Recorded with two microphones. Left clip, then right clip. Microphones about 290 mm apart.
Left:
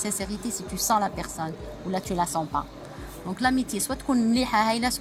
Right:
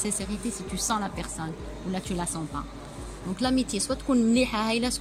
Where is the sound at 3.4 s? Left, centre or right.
Centre.